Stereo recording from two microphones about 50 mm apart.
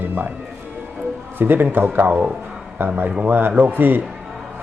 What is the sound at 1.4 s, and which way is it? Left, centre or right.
Speech, right.